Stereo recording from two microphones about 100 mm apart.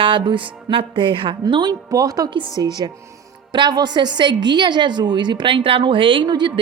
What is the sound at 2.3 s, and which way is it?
A woman's voice, 55° right (ahead or behind).